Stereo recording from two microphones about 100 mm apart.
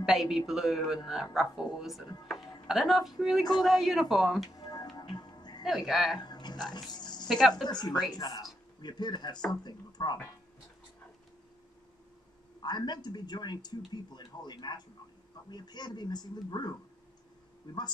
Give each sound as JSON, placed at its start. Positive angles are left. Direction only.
{"t": 0.0, "sound": "speech", "side_deg": -5}
{"t": 4.5, "sound": "music", "side_deg": 40}
{"t": 5.7, "sound": "speech", "side_deg": 0}
{"t": 6.2, "sound": "a sound", "side_deg": 45}
{"t": 6.7, "sound": "music", "side_deg": 45}
{"t": 7.2, "sound": "speech", "side_deg": 0}
{"t": 7.6, "sound": "speech", "side_deg": 45}
{"t": 12.6, "sound": "speech", "side_deg": 45}